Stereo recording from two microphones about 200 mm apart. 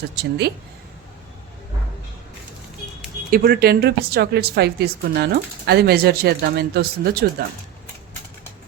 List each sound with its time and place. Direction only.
0.2 s speech: 55° right (ahead or behind)
3.2 s a woman's voice: 45° right (ahead or behind)